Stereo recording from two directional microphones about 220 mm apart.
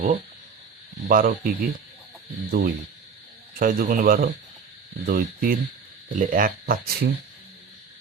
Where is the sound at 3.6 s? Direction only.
40° right (ahead or behind).